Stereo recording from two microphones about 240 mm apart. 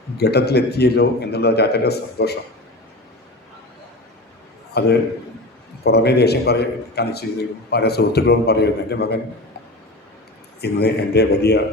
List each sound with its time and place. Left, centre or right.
0.2 s a man's voice: left
4.7 s a man's voice: left
10.6 s a man's voice: left